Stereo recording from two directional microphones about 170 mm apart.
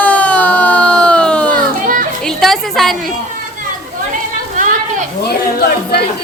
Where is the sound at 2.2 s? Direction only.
Centre (ahead or behind).